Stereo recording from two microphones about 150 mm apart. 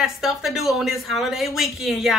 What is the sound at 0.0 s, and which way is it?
Speech, centre (ahead or behind).